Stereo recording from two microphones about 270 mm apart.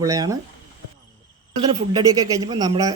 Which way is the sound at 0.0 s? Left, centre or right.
Centre.